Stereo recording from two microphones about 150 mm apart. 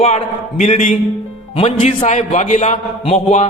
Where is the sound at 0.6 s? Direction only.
55° left (ahead or behind).